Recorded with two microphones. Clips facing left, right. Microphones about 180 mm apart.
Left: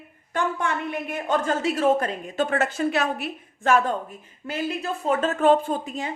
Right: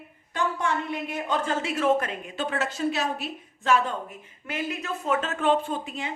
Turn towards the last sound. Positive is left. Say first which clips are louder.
# left 3 dB
turn(degrees=40)  # may be behind; listen again after turning